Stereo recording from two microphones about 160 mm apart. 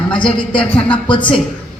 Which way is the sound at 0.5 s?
30° left (ahead or behind).